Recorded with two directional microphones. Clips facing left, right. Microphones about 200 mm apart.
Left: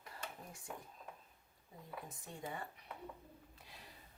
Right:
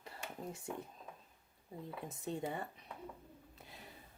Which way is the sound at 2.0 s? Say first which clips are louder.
Right 9 dB; 25° right (ahead or behind).